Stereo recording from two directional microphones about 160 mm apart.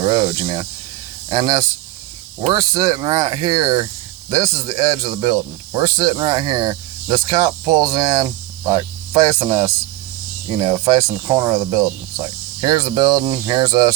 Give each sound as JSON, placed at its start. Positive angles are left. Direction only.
{"t": 0.0, "sound": "speech", "side_deg": -30}